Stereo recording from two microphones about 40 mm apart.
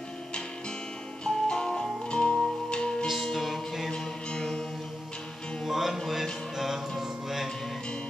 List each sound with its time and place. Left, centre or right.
1.2 s music: centre
3.2 s music: centre
3.9 s music: centre
5.7 s music: centre
7.0 s mantra: centre